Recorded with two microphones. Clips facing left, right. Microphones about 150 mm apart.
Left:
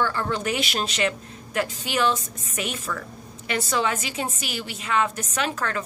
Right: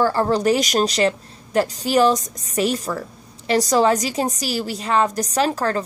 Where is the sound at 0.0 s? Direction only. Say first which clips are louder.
Right 8 dB; 35° right (ahead or behind).